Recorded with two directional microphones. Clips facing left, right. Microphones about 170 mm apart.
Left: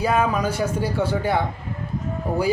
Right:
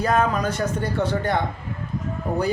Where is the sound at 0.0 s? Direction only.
10° left (ahead or behind).